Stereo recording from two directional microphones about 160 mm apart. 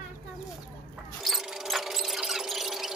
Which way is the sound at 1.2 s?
Centre (ahead or behind).